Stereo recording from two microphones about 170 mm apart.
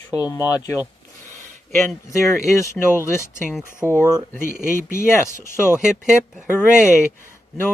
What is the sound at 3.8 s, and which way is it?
Speech, 15° right (ahead or behind).